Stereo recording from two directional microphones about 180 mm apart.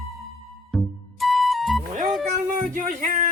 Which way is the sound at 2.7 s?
45° right (ahead or behind).